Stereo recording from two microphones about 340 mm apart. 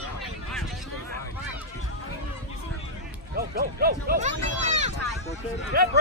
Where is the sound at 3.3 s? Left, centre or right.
Right.